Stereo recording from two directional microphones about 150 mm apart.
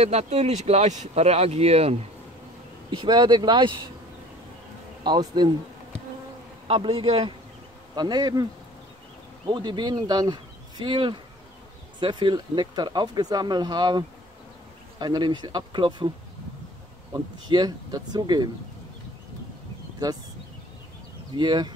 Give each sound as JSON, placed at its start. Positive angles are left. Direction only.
{"t": 0.0, "sound": "speech", "side_deg": -45}
{"t": 2.9, "sound": "speech", "side_deg": -30}
{"t": 5.0, "sound": "speech", "side_deg": -30}
{"t": 6.7, "sound": "speech", "side_deg": -35}
{"t": 7.9, "sound": "speech", "side_deg": -30}
{"t": 9.5, "sound": "speech", "side_deg": -30}
{"t": 17.1, "sound": "speech", "side_deg": -25}
{"t": 21.4, "sound": "speech", "side_deg": -30}